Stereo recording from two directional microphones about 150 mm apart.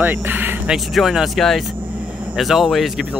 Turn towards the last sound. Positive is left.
turn(degrees=0)  # may be behind; listen again after turning